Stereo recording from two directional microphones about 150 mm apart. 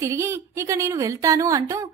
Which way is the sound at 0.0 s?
20° right (ahead or behind).